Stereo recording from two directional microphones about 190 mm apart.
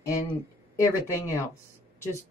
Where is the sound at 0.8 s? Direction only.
15° left (ahead or behind).